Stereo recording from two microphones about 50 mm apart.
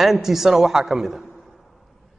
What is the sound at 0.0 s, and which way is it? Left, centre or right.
A man's voice, centre.